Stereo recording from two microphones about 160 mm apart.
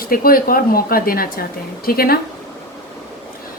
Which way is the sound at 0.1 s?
65° left (ahead or behind).